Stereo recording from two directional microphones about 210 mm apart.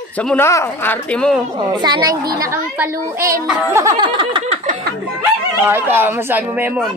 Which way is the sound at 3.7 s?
20° right (ahead or behind).